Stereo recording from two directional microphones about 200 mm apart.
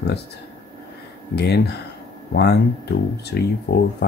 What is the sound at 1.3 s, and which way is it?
Speech, 55° left (ahead or behind).